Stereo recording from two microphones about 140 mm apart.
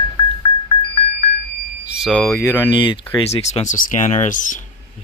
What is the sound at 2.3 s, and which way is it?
Speech, 20° left (ahead or behind).